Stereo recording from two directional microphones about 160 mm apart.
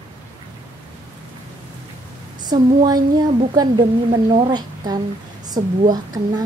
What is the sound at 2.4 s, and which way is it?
A woman's voice, 25° right (ahead or behind).